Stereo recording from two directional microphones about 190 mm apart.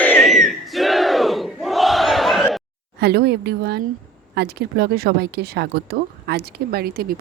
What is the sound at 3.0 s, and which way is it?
Speech, 60° right (ahead or behind).